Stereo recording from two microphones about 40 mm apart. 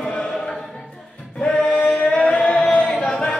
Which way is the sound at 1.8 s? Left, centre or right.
Left.